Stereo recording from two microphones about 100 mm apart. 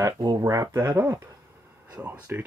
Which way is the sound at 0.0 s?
40° right (ahead or behind).